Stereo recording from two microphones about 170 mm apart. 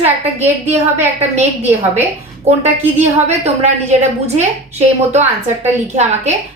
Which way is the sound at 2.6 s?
40° right (ahead or behind).